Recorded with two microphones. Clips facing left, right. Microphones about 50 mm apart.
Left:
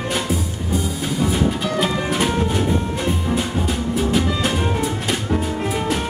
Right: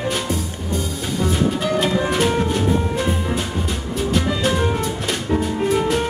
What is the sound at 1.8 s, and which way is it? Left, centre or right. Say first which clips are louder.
Music: right 1 dB; centre.